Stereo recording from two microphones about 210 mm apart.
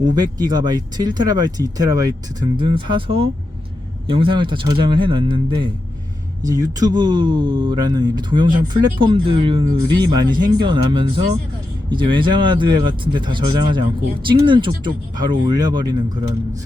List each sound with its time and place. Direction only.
0.2 s speech: 20° right (ahead or behind)